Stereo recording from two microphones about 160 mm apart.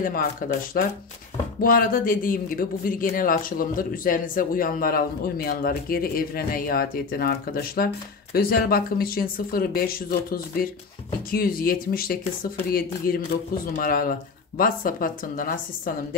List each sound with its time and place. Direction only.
0.4 s speech: 65° left (ahead or behind)
1.6 s speech: 60° left (ahead or behind)